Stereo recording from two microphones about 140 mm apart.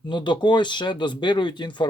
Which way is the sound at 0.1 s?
35° left (ahead or behind).